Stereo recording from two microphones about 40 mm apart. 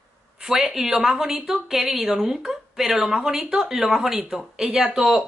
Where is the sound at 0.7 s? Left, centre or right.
Centre.